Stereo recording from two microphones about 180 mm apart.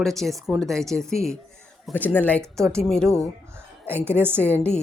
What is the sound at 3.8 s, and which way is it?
Speech, 10° right (ahead or behind).